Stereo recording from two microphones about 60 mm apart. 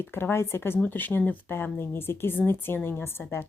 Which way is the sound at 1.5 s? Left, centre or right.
Left.